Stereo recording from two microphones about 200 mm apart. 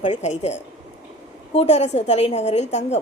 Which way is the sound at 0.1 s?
35° left (ahead or behind).